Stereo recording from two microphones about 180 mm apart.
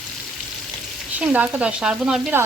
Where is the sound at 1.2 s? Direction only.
10° right (ahead or behind).